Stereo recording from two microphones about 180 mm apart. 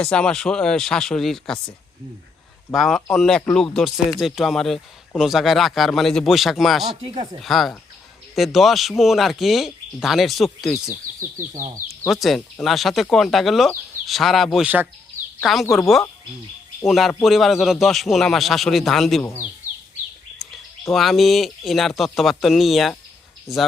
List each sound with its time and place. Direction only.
0.0 s speech: 5° left (ahead or behind)
2.7 s speech: centre (ahead or behind)
11.9 s speech: centre (ahead or behind)
16.8 s speech: centre (ahead or behind)
20.9 s speech: centre (ahead or behind)
23.5 s speech: 15° left (ahead or behind)